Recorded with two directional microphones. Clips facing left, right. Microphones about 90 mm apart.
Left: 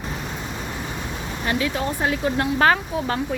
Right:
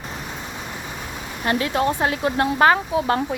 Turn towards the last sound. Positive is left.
turn(degrees=-25)  # may be behind; listen again after turning